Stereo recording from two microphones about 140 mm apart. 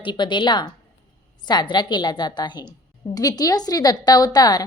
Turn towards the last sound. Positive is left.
turn(degrees=30)  # may be behind; listen again after turning